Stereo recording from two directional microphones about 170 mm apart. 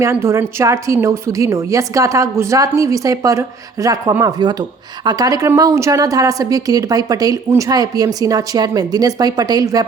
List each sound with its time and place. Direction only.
0.0 s a woman's voice: 15° right (ahead or behind)